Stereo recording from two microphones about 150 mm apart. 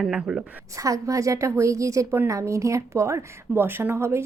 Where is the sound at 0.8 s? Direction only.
20° right (ahead or behind).